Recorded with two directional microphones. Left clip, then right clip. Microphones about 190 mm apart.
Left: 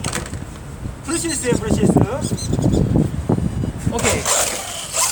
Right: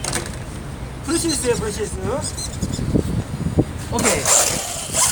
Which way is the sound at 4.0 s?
5° left (ahead or behind).